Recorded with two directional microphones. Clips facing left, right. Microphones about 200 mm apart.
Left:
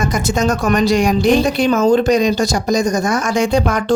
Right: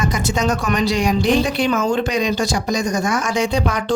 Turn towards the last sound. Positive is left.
turn(degrees=45)  # may be behind; listen again after turning